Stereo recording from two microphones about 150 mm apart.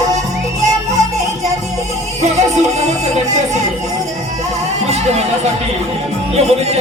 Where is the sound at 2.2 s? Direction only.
50° right (ahead or behind).